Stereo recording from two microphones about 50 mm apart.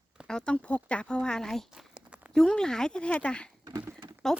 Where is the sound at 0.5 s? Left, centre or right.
Left.